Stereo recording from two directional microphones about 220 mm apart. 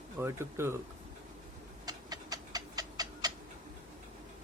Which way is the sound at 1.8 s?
15° right (ahead or behind).